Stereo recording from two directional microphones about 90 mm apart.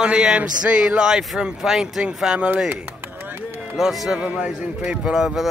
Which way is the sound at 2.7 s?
20° right (ahead or behind).